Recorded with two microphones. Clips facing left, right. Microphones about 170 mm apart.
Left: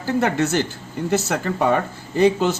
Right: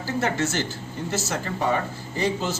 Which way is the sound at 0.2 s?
60° left (ahead or behind).